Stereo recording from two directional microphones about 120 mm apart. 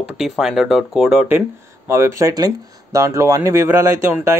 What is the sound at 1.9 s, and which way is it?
Speech, 25° right (ahead or behind).